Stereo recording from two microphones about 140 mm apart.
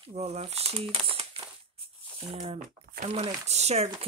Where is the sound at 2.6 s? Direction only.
75° right (ahead or behind).